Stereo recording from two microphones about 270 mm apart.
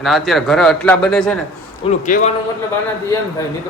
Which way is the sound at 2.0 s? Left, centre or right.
Left.